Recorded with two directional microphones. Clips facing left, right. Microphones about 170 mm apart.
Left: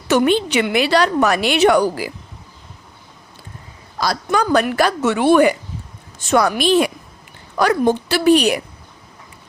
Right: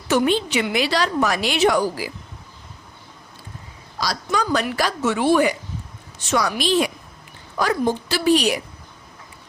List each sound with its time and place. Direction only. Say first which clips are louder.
0.1 s a woman's voice: left 4 dB; 65° left (ahead or behind)
4.0 s a woman's voice: left 5 dB; 55° left (ahead or behind)